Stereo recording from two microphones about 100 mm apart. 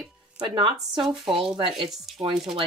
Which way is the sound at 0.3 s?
55° right (ahead or behind).